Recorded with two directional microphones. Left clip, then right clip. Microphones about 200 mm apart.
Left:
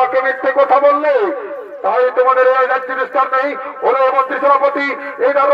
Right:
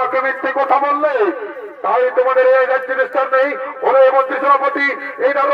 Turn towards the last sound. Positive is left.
turn(degrees=10)  # may be behind; listen again after turning